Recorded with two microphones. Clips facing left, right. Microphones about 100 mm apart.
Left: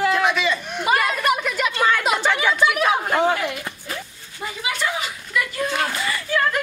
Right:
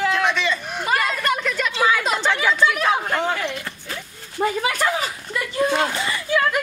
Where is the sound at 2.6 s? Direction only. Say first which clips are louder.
Even; 10° left (ahead or behind).